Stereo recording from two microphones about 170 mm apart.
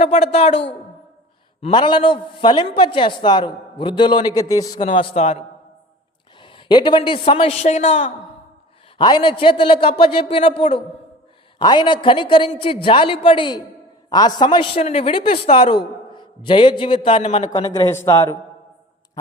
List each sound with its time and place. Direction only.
0.0 s a man's voice: 35° left (ahead or behind)
1.6 s a man's voice: 30° left (ahead or behind)
4.8 s a man's voice: 40° left (ahead or behind)
6.4 s a man's voice: 30° left (ahead or behind)
9.0 s a man's voice: 30° left (ahead or behind)